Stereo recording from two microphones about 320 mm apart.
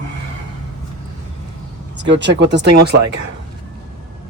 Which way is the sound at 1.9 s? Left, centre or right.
Right.